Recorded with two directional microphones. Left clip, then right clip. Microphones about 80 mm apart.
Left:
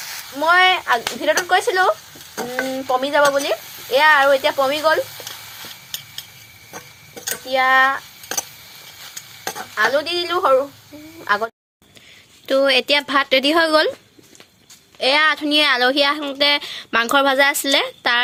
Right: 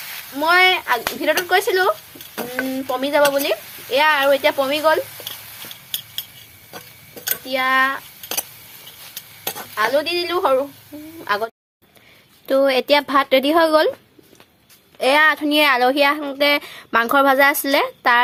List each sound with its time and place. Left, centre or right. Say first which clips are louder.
0.3 s speech: even; right
2.9 s speech: left 1 dB; right
7.4 s speech: left 3 dB; right
9.7 s speech: even; right
12.5 s speech: even; centre
14.9 s speech: right 1 dB; right; by 18.2 s centre